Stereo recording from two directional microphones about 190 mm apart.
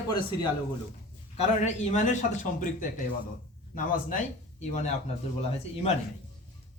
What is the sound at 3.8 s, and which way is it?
Speech, 45° left (ahead or behind).